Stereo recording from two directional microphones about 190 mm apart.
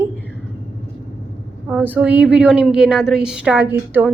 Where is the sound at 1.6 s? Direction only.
10° right (ahead or behind).